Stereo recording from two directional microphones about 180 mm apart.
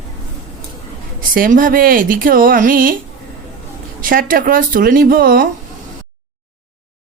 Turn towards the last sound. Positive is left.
turn(degrees=-55)  # may be behind; listen again after turning